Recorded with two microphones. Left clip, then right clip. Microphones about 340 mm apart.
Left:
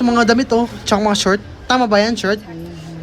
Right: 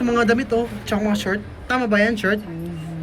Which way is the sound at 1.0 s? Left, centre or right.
Left.